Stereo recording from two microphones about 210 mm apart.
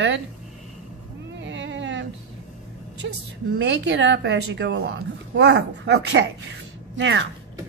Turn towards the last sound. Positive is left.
turn(degrees=-60)  # may be behind; listen again after turning